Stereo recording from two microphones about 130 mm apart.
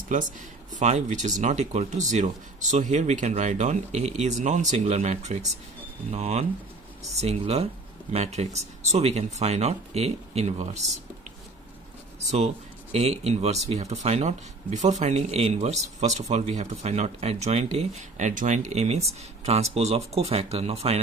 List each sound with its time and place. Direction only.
0.7 s speech: 60° right (ahead or behind)
12.9 s speech: 50° right (ahead or behind)